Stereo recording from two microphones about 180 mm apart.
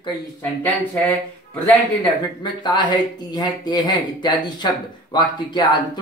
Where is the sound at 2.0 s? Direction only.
25° left (ahead or behind).